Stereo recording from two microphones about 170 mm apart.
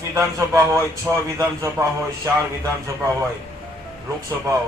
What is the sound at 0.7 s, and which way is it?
Speech, 15° right (ahead or behind).